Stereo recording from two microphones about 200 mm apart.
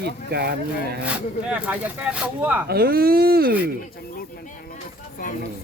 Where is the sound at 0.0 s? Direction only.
55° right (ahead or behind).